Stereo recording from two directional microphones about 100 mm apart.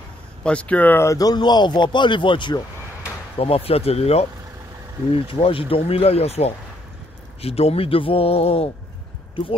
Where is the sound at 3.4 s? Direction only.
75° left (ahead or behind).